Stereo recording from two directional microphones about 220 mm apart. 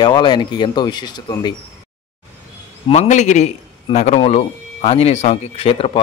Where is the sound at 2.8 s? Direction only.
30° left (ahead or behind).